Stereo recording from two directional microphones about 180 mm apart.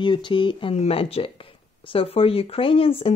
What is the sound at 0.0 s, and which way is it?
Speech, 25° left (ahead or behind).